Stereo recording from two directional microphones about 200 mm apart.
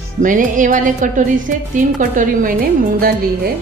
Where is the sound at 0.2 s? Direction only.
40° right (ahead or behind).